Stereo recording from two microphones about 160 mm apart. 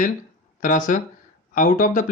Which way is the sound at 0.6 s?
55° left (ahead or behind).